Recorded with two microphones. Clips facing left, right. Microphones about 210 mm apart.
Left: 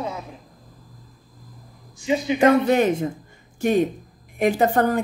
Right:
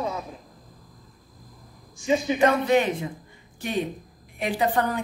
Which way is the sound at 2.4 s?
45° left (ahead or behind).